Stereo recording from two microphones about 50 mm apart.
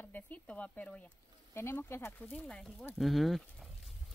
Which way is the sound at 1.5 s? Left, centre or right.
Left.